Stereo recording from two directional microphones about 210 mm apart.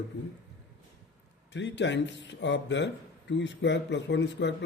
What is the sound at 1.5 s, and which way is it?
A man's voice, 55° left (ahead or behind).